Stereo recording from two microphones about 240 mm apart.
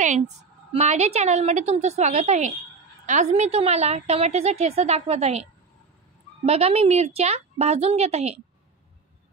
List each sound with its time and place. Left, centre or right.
0.7 s a woman's voice: right